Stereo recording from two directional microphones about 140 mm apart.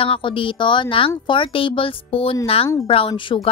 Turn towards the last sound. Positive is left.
turn(degrees=35)  # may be behind; listen again after turning